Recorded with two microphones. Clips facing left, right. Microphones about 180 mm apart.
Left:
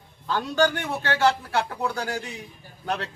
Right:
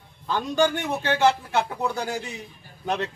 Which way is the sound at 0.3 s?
15° right (ahead or behind).